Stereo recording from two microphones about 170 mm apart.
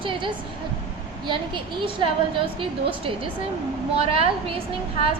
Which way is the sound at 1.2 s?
30° right (ahead or behind).